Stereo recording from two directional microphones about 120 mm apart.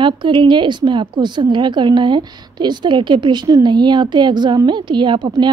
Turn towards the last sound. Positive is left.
turn(degrees=-40)  # may be behind; listen again after turning